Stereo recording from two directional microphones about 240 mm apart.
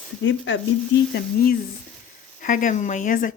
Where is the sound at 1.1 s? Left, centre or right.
Left.